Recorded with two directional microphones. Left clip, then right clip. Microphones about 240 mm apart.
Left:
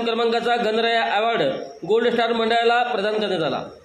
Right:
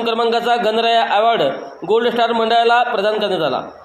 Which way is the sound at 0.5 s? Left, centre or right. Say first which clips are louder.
Right 5 dB; right.